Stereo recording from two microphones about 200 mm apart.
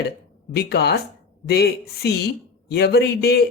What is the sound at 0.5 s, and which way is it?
A man's voice, 55° left (ahead or behind).